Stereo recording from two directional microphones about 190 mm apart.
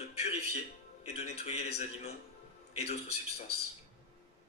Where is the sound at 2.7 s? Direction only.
35° left (ahead or behind).